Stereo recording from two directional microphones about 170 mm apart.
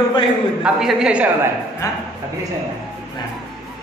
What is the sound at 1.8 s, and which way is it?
Speech, 20° left (ahead or behind).